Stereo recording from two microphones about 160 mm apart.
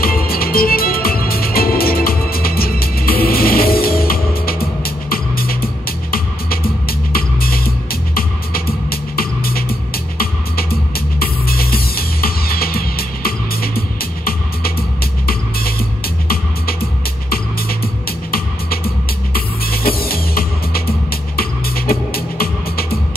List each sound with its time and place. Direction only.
0.0 s music: 70° left (ahead or behind)
10.7 s music: 70° left (ahead or behind)
19.3 s music: 70° left (ahead or behind)